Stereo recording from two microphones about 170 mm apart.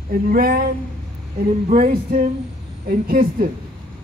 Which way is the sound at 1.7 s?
50° right (ahead or behind).